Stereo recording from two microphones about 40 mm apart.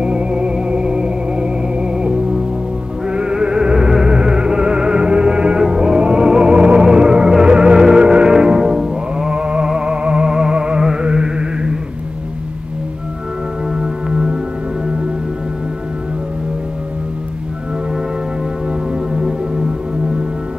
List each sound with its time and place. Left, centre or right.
0.0 s music: right
13.7 s music: centre
19.1 s music: centre